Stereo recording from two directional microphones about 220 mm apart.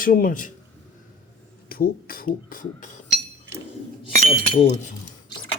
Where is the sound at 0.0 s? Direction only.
40° left (ahead or behind).